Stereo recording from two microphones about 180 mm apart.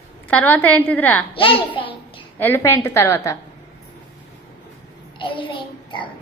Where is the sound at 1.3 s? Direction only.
30° left (ahead or behind).